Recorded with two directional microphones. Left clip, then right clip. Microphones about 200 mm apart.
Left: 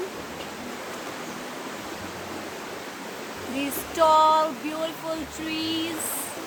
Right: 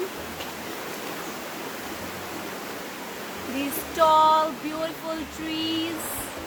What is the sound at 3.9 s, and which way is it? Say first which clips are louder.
Female singing: even; 20° left (ahead or behind).